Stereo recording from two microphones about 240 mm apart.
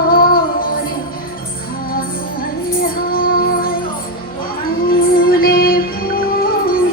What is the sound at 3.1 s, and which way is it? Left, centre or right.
Music, left.